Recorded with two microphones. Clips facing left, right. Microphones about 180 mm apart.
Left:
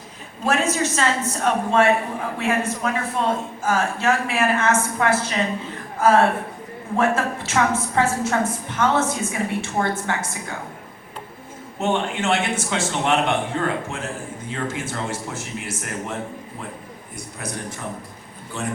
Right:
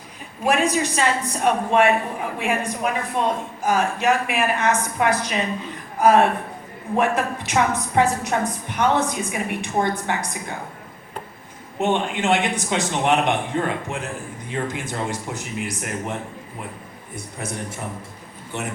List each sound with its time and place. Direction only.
0.4 s a woman's voice: 15° right (ahead or behind)
11.8 s a woman's voice: 15° right (ahead or behind)